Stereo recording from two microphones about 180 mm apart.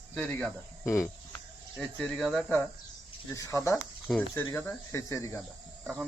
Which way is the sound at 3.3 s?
15° left (ahead or behind).